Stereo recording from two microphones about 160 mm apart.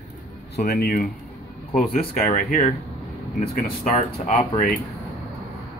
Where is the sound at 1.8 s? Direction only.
55° left (ahead or behind).